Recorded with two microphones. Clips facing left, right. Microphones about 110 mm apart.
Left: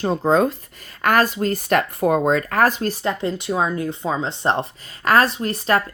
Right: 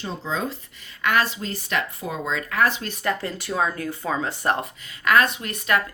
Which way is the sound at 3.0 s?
20° left (ahead or behind).